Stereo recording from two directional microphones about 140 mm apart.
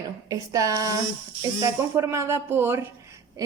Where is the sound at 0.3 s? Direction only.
25° right (ahead or behind).